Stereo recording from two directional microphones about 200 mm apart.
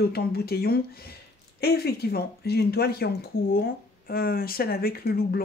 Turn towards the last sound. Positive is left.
turn(degrees=50)  # may be behind; listen again after turning